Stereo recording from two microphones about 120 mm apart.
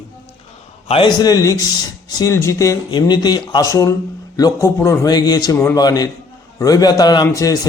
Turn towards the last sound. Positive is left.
turn(degrees=30)  # may be behind; listen again after turning